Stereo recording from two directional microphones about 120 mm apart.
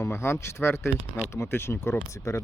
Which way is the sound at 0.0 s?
20° left (ahead or behind).